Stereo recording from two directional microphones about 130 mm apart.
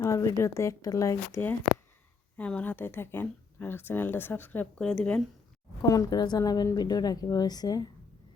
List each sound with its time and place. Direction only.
0.0 s speech: 25° left (ahead or behind)
2.4 s speech: 10° left (ahead or behind)
5.8 s a woman's voice: 30° left (ahead or behind)